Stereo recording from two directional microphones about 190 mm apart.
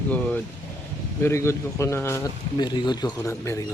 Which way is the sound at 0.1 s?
10° left (ahead or behind).